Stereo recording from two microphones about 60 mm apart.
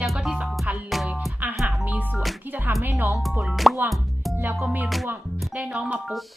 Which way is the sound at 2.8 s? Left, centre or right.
Right.